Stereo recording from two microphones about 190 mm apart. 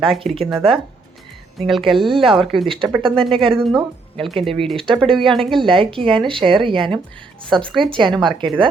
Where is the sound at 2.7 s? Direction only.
25° right (ahead or behind).